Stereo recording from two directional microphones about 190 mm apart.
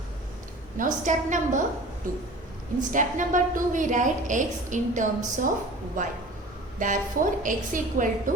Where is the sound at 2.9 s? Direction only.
40° right (ahead or behind).